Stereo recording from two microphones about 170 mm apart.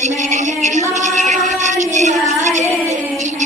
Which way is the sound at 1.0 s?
45° right (ahead or behind).